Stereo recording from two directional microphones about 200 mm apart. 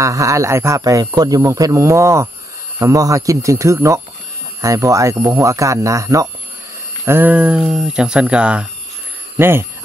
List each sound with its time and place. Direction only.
0.0 s speech: 15° right (ahead or behind)